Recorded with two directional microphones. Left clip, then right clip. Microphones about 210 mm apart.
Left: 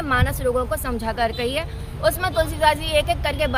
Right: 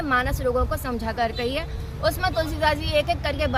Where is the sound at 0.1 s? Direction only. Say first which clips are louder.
Left 2 dB; 20° left (ahead or behind).